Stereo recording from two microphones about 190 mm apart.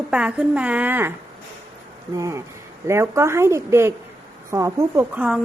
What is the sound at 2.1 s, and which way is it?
A woman's voice, 15° right (ahead or behind).